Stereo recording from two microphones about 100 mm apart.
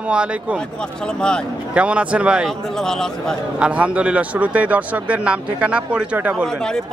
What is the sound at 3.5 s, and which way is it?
Speech, 10° right (ahead or behind).